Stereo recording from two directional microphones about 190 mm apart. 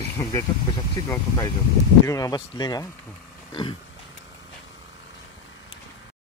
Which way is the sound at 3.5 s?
20° left (ahead or behind).